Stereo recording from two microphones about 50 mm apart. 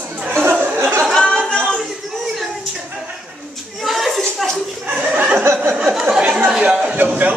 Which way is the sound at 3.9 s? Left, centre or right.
Centre.